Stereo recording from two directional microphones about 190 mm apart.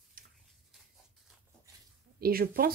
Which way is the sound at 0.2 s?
50° right (ahead or behind).